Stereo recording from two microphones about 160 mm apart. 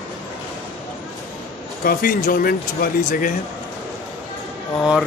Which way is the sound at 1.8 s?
65° left (ahead or behind).